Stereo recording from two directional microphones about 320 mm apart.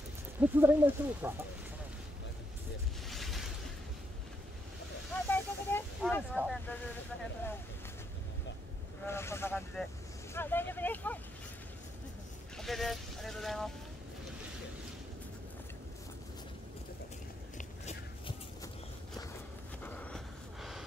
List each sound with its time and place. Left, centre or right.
0.4 s speech: centre
3.1 s boat: centre
5.3 s vehicle: centre
6.3 s speech: centre
9.0 s speech: centre
12.5 s speech: centre
17.6 s walk: centre
19.8 s a sound: centre